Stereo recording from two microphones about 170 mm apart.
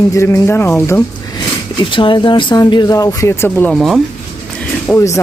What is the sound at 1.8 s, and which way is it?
Speech, 30° left (ahead or behind).